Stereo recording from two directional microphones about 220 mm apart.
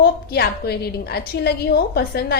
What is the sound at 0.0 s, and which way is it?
A woman's voice, 45° left (ahead or behind).